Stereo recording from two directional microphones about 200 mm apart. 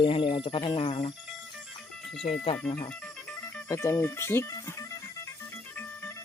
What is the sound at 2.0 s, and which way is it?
Music, centre (ahead or behind).